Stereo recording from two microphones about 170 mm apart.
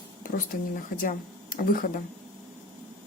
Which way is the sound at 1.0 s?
55° left (ahead or behind).